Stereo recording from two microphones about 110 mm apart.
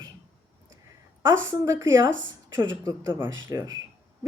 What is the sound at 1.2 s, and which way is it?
Speech, 25° right (ahead or behind).